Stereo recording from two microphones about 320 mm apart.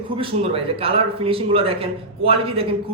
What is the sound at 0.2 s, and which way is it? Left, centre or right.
A man's voice, centre.